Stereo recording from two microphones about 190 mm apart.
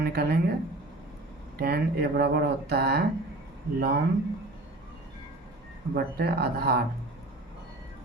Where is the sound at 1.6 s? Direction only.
55° right (ahead or behind).